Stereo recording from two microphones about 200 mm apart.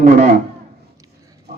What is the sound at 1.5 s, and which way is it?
Pig, 55° right (ahead or behind).